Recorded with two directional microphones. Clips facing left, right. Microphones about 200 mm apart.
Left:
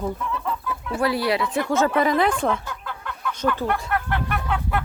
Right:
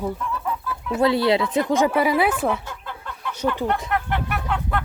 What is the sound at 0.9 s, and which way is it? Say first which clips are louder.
Speech: right 4 dB; 25° right (ahead or behind).